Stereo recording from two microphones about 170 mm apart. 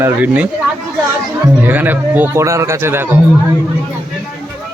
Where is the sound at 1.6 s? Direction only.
10° right (ahead or behind).